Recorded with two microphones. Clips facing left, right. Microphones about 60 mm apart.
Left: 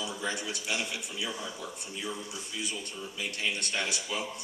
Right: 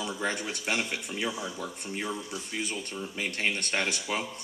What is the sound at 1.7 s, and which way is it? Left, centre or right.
A man's voice, right.